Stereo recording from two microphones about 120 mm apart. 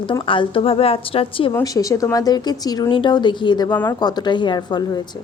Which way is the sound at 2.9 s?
45° left (ahead or behind).